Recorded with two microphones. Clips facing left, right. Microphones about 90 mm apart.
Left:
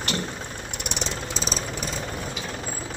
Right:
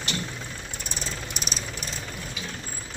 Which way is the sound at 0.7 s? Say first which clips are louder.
Left 6 dB; 70° left (ahead or behind).